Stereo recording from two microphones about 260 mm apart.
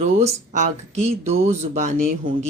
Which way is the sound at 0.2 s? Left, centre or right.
Right.